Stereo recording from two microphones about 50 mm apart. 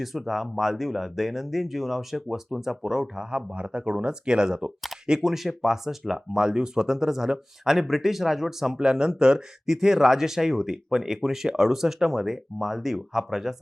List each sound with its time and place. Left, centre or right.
0.0 s speech: centre
3.3 s speech: right; by 13.6 s centre